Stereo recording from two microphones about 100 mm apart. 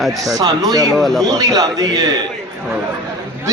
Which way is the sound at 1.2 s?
40° right (ahead or behind).